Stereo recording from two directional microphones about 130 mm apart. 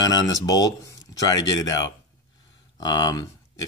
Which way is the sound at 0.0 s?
30° left (ahead or behind).